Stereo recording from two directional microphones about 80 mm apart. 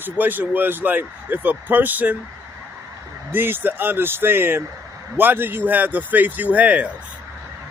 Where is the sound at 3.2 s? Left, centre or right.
Right.